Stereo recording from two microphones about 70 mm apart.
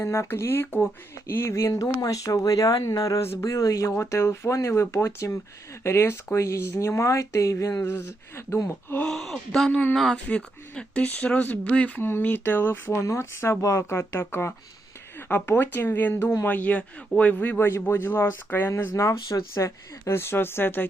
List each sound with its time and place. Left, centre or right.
0.0 s speech: left
3.9 s speech: left
7.7 s speech: left
9.0 s a woman's voice: centre; by 13.8 s left
13.9 s speech: left
18.9 s speech: left